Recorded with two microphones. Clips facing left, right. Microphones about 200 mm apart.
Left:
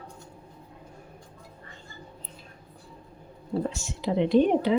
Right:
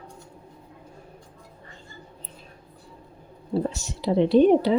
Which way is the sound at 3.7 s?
40° right (ahead or behind).